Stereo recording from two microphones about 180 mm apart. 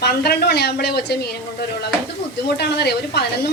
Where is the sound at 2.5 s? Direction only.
65° left (ahead or behind).